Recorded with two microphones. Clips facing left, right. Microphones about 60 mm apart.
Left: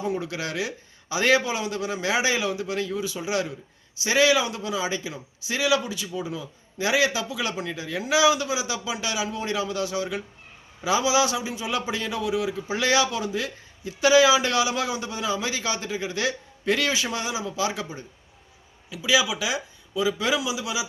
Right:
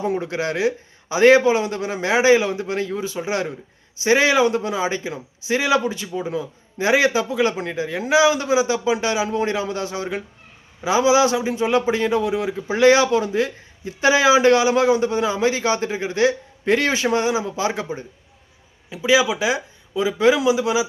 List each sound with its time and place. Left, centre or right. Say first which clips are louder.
0.0 s a man's voice: right 6 dB; right